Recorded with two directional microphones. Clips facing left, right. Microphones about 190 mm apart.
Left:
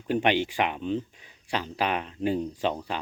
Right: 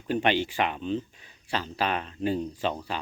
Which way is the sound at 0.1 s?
15° left (ahead or behind).